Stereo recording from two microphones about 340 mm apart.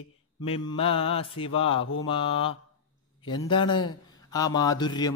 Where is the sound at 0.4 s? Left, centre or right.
Centre.